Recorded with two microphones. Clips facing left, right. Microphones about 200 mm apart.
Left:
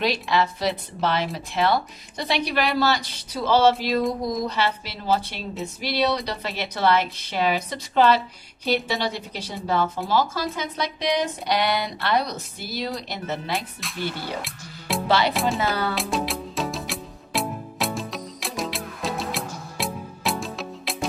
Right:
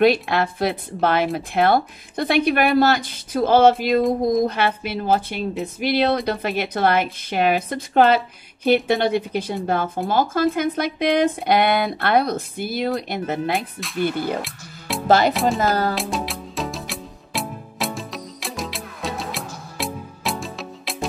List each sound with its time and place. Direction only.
0.0 s speech: 55° right (ahead or behind)
13.9 s speech: 50° right (ahead or behind)
14.4 s music: centre (ahead or behind)
15.0 s speech: 45° right (ahead or behind)
15.3 s speech: centre (ahead or behind)
15.9 s music: centre (ahead or behind)